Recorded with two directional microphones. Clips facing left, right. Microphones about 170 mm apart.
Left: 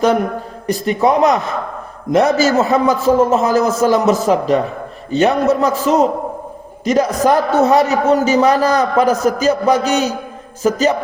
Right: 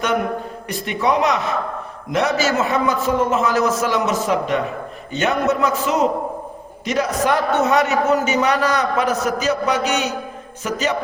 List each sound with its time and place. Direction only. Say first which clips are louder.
0.7 s a man's voice: left 6 dB; 40° left (ahead or behind)